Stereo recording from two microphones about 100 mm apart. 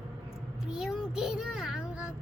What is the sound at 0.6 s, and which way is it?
A child's voice, 5° right (ahead or behind).